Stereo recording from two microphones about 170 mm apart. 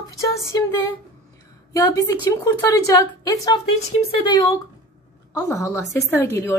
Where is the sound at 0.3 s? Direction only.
15° left (ahead or behind).